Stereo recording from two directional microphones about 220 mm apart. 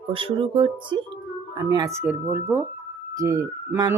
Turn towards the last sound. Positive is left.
turn(degrees=-10)  # may be behind; listen again after turning